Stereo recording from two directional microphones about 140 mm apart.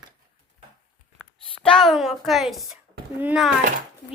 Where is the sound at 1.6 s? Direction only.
5° left (ahead or behind).